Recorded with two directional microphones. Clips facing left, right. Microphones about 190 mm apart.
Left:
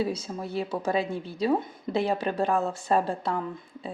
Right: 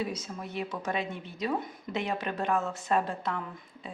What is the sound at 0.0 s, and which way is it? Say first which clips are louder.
Speech: left 5 dB; 30° left (ahead or behind).